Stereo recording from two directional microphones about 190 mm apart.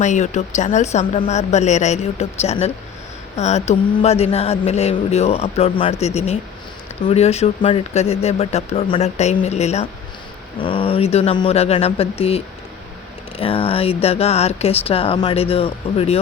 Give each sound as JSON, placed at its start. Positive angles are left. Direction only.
{"t": 0.0, "sound": "mantra", "side_deg": 40}
{"t": 13.4, "sound": "mantra", "side_deg": 30}